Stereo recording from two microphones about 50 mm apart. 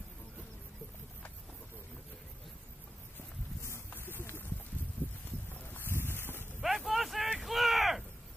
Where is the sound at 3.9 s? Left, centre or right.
Left.